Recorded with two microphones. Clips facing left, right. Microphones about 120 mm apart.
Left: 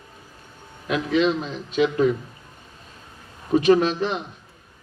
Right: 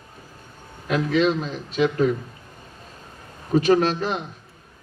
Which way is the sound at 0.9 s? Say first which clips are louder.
Even; 40° right (ahead or behind).